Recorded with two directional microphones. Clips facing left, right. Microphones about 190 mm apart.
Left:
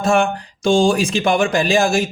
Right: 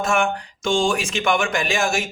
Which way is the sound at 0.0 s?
35° left (ahead or behind).